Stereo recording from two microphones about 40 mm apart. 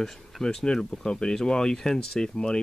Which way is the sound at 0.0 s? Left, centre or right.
Centre.